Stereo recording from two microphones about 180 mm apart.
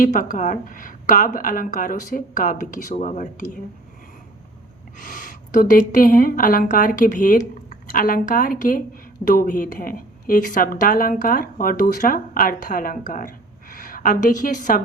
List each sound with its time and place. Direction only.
0.0 s a woman's voice: 50° left (ahead or behind)
4.9 s a woman's voice: 50° left (ahead or behind)